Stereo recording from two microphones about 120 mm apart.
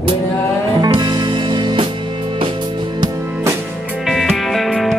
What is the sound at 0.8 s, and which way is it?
Music, 40° right (ahead or behind).